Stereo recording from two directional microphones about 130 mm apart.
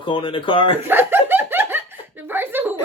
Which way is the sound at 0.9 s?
15° right (ahead or behind).